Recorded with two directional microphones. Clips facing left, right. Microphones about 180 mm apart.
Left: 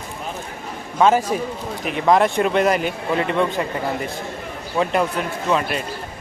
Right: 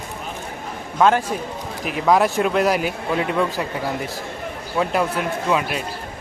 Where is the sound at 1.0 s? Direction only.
Centre (ahead or behind).